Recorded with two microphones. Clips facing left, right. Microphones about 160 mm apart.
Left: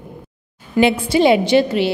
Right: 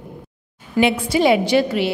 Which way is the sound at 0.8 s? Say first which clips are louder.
Left 2 dB; 30° left (ahead or behind).